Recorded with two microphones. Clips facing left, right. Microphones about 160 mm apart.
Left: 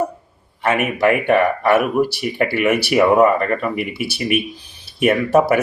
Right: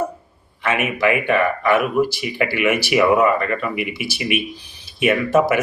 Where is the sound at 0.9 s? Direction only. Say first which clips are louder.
Left 3 dB; 50° left (ahead or behind).